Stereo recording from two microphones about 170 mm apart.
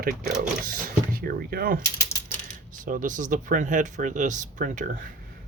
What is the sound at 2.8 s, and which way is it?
Speech, 50° right (ahead or behind).